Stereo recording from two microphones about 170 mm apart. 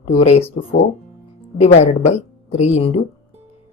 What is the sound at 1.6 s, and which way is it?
Speech, 40° left (ahead or behind).